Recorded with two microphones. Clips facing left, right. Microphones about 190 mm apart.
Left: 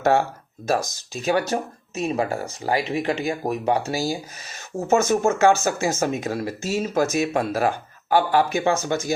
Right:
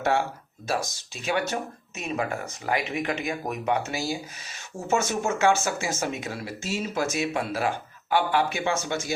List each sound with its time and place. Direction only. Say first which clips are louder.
0.7 s speech: left 6 dB; 40° left (ahead or behind)